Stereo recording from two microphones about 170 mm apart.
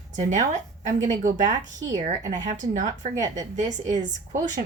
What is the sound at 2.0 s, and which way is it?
A woman's voice, 45° right (ahead or behind).